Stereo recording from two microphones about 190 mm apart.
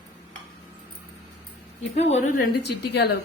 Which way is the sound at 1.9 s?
35° left (ahead or behind).